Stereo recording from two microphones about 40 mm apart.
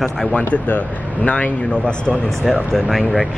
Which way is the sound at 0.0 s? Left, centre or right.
Centre.